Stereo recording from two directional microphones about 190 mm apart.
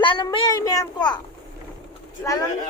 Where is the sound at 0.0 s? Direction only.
25° left (ahead or behind).